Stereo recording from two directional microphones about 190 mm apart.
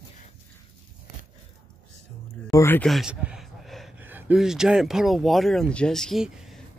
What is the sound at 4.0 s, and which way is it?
Speech, 10° right (ahead or behind).